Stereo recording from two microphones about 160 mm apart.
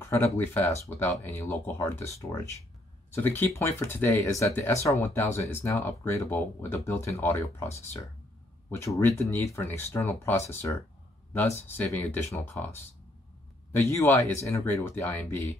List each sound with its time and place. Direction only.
0.0 s speech: 15° left (ahead or behind)
8.7 s speech: 20° left (ahead or behind)